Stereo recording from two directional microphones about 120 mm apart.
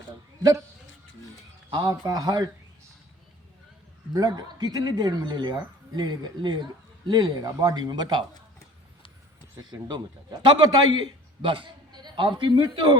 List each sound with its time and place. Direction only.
1.7 s speech: 30° right (ahead or behind)
4.1 s speech: 35° right (ahead or behind)
9.6 s a man's voice: 35° right (ahead or behind)